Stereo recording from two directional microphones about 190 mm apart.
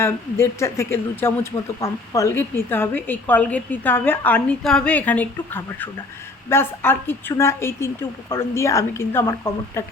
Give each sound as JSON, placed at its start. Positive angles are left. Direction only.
{"t": 0.0, "sound": "speech", "side_deg": 15}